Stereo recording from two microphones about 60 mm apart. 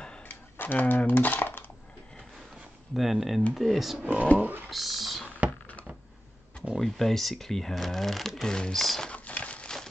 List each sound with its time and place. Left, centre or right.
0.3 s coin: left
2.9 s speech: centre
4.0 s speech: right
4.6 s speech: centre
6.8 s speech: centre
9.1 s a sound: left